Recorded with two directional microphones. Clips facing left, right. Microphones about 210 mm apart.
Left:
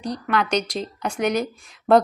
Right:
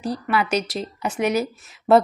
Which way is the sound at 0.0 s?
5° right (ahead or behind).